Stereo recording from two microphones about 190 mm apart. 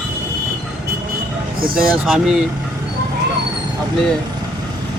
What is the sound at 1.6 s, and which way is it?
Speech, 50° right (ahead or behind).